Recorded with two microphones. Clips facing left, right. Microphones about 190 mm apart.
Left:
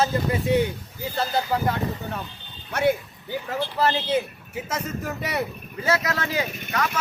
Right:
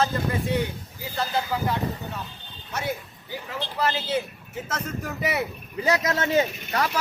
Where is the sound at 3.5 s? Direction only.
35° left (ahead or behind).